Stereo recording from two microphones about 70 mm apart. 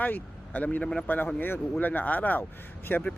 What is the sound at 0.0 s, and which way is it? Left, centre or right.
Speech, left.